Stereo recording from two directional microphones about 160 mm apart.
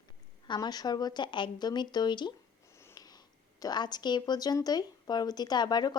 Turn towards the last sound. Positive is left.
turn(degrees=25)  # may be behind; listen again after turning